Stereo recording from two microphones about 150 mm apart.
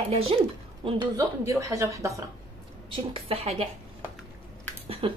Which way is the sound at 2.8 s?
35° right (ahead or behind).